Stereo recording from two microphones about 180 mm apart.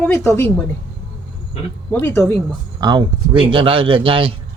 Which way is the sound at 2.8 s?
25° right (ahead or behind).